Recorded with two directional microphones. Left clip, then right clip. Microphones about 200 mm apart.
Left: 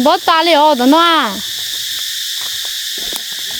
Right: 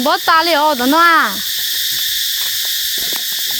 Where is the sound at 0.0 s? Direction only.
35° left (ahead or behind).